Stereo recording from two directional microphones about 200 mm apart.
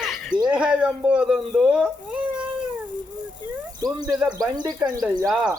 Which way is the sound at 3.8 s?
20° right (ahead or behind).